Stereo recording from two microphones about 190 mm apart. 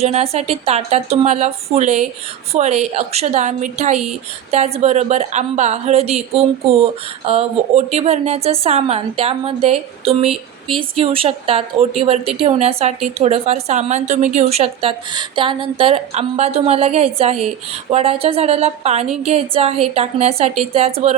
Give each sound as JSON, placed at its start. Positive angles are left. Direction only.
{"t": 0.0, "sound": "a woman's voice", "side_deg": -35}